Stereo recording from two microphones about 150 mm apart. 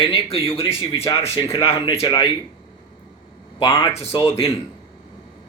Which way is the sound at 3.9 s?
45° left (ahead or behind).